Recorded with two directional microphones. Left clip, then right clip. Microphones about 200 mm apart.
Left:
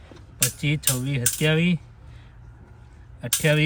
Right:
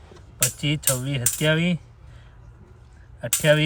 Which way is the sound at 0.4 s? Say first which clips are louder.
Right 1 dB; 5° right (ahead or behind).